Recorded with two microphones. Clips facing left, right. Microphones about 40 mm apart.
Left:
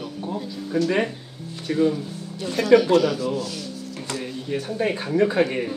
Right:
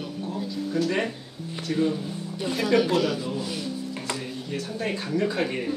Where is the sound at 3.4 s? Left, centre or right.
Centre.